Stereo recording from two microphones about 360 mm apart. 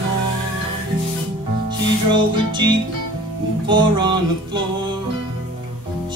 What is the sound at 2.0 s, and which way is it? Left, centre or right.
Music, centre.